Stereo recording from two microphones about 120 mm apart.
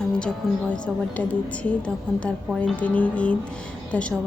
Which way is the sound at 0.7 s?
10° left (ahead or behind).